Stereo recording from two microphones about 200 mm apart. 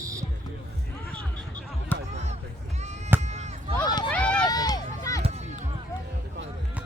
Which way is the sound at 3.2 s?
35° right (ahead or behind).